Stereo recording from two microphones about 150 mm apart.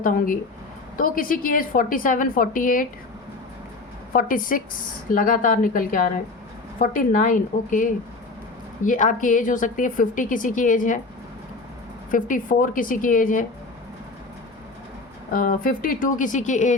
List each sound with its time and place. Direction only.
0.0 s a woman's voice: 65° left (ahead or behind)
4.1 s a woman's voice: 65° left (ahead or behind)
12.1 s a woman's voice: 60° left (ahead or behind)
15.3 s a woman's voice: 70° left (ahead or behind)